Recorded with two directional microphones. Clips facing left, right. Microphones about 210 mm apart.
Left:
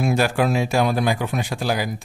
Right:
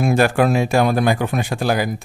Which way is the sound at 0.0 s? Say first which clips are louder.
Right 4 dB; 50° right (ahead or behind).